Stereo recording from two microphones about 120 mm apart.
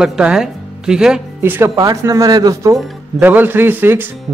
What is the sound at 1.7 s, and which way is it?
Speech, 30° right (ahead or behind).